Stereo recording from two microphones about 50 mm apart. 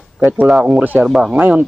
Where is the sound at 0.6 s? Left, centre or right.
Right.